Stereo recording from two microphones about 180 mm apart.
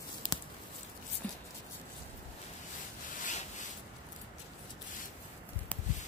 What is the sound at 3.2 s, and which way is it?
Rub, 45° left (ahead or behind).